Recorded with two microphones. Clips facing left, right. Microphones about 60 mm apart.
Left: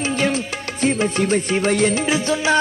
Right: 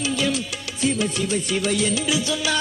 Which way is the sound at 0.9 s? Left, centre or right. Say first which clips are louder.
Left 4 dB; left.